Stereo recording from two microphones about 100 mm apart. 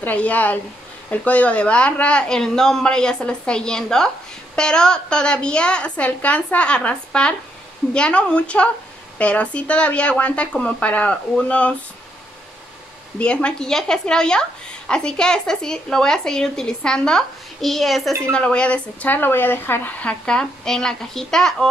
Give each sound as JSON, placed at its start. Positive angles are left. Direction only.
{"t": 0.0, "sound": "speech", "side_deg": 15}
{"t": 13.2, "sound": "speech", "side_deg": 10}